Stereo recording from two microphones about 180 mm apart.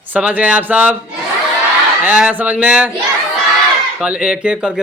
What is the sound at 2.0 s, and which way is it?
Speech, 5° right (ahead or behind).